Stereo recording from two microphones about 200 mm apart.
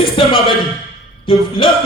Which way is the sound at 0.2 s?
25° left (ahead or behind).